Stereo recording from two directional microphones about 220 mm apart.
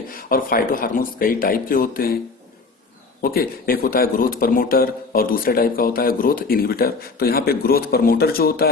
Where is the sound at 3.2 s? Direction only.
40° left (ahead or behind).